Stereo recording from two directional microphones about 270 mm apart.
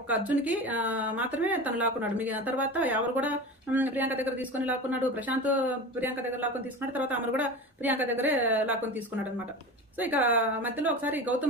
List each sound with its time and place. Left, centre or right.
0.1 s a woman's voice: centre